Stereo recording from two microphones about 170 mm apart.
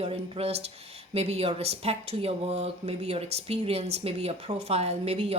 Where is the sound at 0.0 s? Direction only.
35° right (ahead or behind).